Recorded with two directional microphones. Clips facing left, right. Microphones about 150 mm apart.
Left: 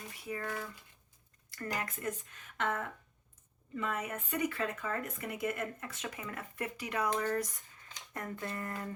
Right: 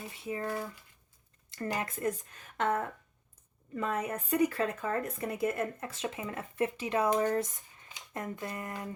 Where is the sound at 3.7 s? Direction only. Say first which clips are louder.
Right 4 dB; 35° right (ahead or behind).